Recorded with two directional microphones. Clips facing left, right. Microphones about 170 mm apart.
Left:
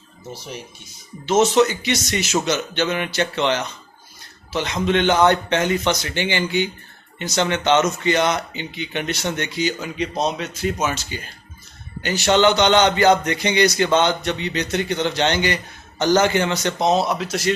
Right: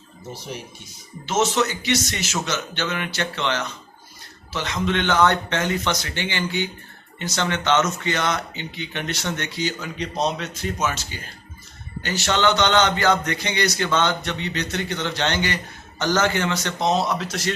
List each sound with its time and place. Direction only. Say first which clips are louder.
1.4 s a man's voice: left 5 dB; 15° left (ahead or behind)